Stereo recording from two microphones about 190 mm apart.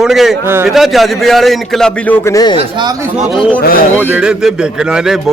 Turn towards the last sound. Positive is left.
turn(degrees=-5)  # may be behind; listen again after turning